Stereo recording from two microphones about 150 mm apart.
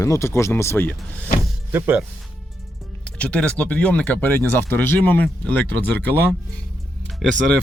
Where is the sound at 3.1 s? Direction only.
10° left (ahead or behind).